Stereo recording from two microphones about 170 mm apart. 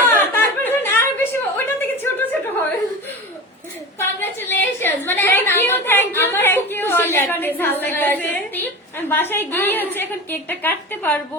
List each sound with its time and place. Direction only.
0.0 s chuckle: 10° left (ahead or behind)
4.2 s a sound: 10° left (ahead or behind)
9.0 s a woman's voice: 10° left (ahead or behind)